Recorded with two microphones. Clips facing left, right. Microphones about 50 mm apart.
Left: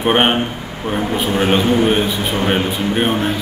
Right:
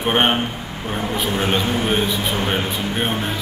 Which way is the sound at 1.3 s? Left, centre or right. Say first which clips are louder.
Left 6 dB; left.